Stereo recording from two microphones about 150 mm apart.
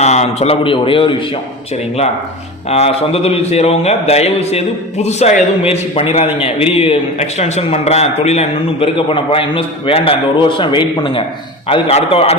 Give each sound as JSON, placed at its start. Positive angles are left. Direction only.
{"t": 0.0, "sound": "a man's voice", "side_deg": 45}
{"t": 2.6, "sound": "a man's voice", "side_deg": 45}
{"t": 11.7, "sound": "a man's voice", "side_deg": 40}